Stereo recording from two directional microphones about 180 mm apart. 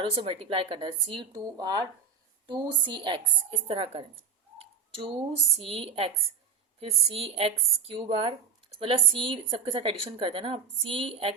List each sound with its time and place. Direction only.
0.0 s speech: 30° right (ahead or behind)
4.5 s bird: 35° right (ahead or behind)
5.5 s a woman's voice: 30° right (ahead or behind)